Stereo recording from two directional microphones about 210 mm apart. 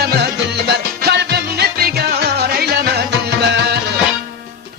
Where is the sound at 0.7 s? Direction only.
50° right (ahead or behind).